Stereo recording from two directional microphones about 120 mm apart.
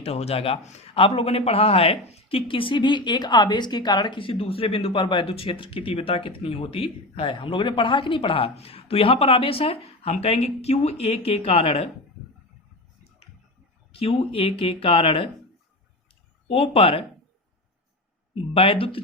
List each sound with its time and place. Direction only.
0.0 s a man's voice: 60° left (ahead or behind)
13.9 s a man's voice: 50° left (ahead or behind)
16.5 s a man's voice: 50° left (ahead or behind)
18.5 s a man's voice: 50° left (ahead or behind)